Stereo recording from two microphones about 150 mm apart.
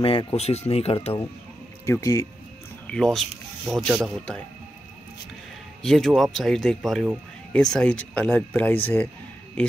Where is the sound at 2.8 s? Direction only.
5° left (ahead or behind).